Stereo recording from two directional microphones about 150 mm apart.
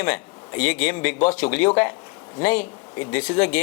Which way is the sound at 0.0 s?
10° left (ahead or behind).